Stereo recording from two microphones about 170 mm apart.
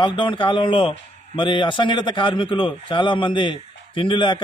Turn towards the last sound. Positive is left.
turn(degrees=30)  # may be behind; listen again after turning